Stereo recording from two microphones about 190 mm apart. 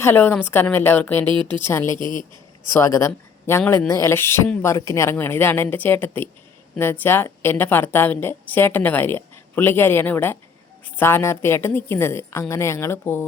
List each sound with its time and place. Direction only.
0.0 s a woman's voice: 10° left (ahead or behind)
1.3 s speech: 25° right (ahead or behind)
1.6 s a woman's voice: 15° left (ahead or behind)
2.0 s speech: 25° right (ahead or behind)
2.7 s a woman's voice: 15° left (ahead or behind)